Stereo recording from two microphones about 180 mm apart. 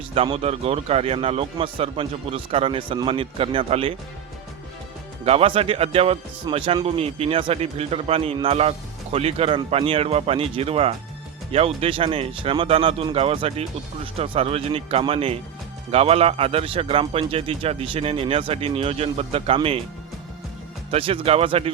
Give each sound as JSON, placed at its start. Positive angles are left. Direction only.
{"t": 0.1, "sound": "a man's voice", "side_deg": -30}
{"t": 5.2, "sound": "a man's voice", "side_deg": -35}
{"t": 20.9, "sound": "a man's voice", "side_deg": -35}